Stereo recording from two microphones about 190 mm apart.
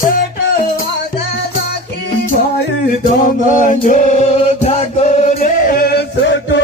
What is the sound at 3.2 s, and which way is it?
Music, 45° left (ahead or behind).